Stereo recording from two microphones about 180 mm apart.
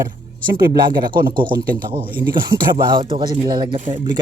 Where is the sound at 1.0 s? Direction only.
50° right (ahead or behind).